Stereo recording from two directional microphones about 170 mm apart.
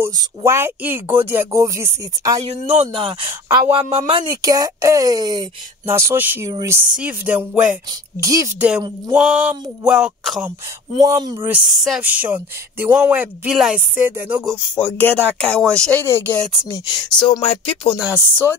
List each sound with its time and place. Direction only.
0.0 s speech: 15° right (ahead or behind)
2.4 s speech: 40° right (ahead or behind)
3.3 s speech: 15° right (ahead or behind)
3.7 s speech: 30° right (ahead or behind); by 7.7 s 10° right (ahead or behind)
8.2 s speech: 20° right (ahead or behind)
8.5 s speech: 5° right (ahead or behind)
9.1 s a sound: 10° right (ahead or behind)
11.0 s speech: 20° right (ahead or behind)
11.4 s a sound: 5° right (ahead or behind)
12.0 s speech: 10° right (ahead or behind)
15.0 s speech: 10° left (ahead or behind)
15.5 s a sound: 5° left (ahead or behind)
16.1 s speech: 10° left (ahead or behind)
16.8 s speech: 25° left (ahead or behind)